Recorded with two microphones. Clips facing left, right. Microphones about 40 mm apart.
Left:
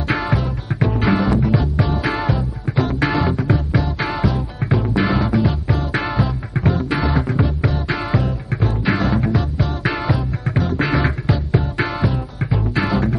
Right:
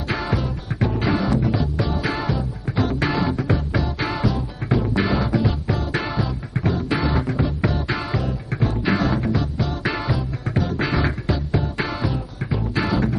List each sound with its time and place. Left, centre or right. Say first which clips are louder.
0.1 s music: left 3 dB; centre